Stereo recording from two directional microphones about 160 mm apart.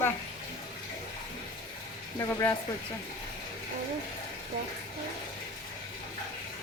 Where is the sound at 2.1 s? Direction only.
15° left (ahead or behind).